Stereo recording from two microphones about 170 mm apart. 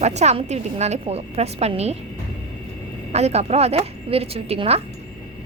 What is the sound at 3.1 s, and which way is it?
A woman's voice, 40° right (ahead or behind).